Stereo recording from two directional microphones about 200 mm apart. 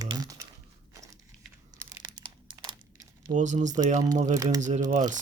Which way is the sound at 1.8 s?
20° right (ahead or behind).